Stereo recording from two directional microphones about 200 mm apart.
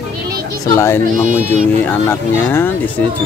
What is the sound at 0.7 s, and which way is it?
Speech, 15° left (ahead or behind).